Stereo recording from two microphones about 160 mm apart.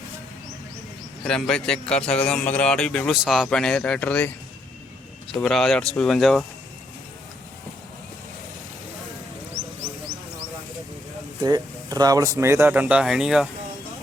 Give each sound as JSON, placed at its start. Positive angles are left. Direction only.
{"t": 1.2, "sound": "a man's voice", "side_deg": 5}
{"t": 5.3, "sound": "a man's voice", "side_deg": 0}
{"t": 11.4, "sound": "speech", "side_deg": -25}